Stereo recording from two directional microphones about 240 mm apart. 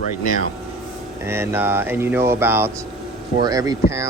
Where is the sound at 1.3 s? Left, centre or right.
Centre.